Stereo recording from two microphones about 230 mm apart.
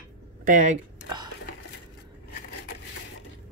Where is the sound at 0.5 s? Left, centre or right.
Right.